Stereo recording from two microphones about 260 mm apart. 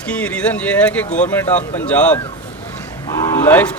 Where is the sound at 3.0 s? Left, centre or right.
Centre.